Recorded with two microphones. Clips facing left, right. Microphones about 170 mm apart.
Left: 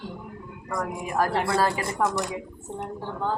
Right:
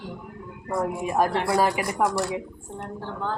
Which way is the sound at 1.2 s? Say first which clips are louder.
Right 1 dB; 20° right (ahead or behind).